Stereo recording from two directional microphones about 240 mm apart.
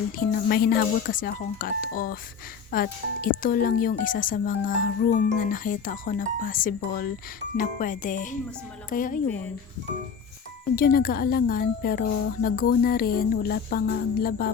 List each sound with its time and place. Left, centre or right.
0.2 s speech: left
10.8 s speech: left